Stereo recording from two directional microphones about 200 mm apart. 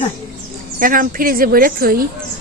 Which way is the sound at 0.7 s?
45° right (ahead or behind).